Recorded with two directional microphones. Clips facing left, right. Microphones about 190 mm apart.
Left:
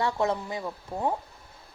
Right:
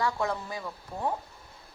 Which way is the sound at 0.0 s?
20° left (ahead or behind).